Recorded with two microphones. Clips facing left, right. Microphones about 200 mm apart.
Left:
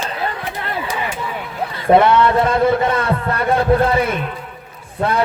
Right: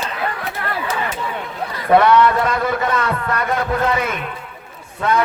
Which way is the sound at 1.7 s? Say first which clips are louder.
Left 1 dB; 25° left (ahead or behind).